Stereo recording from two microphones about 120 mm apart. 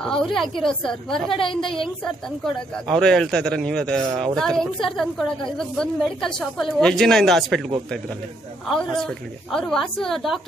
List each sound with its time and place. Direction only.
0.0 s a woman's voice: 5° left (ahead or behind)
1.4 s a woman's voice: 45° left (ahead or behind)
1.8 s a woman's voice: 5° left (ahead or behind)
8.6 s a woman's voice: 5° left (ahead or behind)